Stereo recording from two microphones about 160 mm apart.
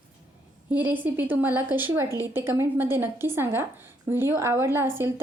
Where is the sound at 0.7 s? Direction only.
10° right (ahead or behind).